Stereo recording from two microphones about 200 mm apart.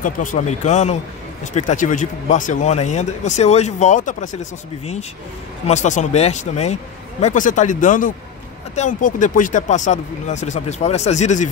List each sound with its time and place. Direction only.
0.0 s speech: 40° left (ahead or behind)